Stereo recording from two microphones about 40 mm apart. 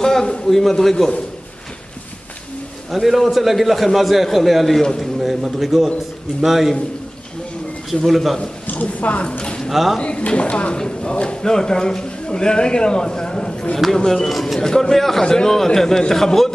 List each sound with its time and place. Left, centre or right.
0.0 s a man's voice: centre
2.9 s a man's voice: centre
7.9 s a man's voice: centre
8.8 s a woman's voice: left
9.4 s speech: left
9.7 s speech: centre
9.9 s a man's voice: left
13.9 s a man's voice: centre